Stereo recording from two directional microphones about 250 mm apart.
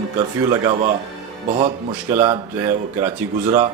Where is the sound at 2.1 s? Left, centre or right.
Centre.